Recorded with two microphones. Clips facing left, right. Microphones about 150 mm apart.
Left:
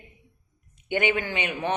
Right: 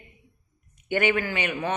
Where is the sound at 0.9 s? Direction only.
15° left (ahead or behind).